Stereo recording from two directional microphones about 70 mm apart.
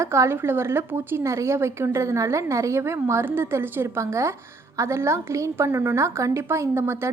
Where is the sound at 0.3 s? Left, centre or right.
Right.